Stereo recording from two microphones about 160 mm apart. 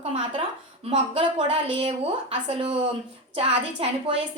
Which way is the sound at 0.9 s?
35° right (ahead or behind).